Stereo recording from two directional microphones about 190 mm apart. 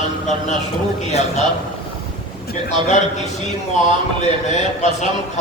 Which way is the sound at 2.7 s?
35° left (ahead or behind).